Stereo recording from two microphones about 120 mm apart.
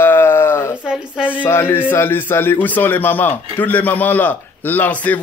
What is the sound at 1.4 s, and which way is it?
Speech, 20° left (ahead or behind).